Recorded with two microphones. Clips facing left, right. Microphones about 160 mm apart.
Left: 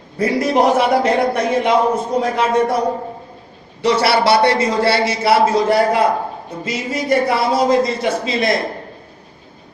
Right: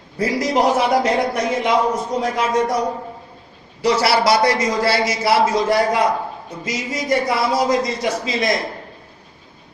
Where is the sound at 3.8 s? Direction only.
30° left (ahead or behind).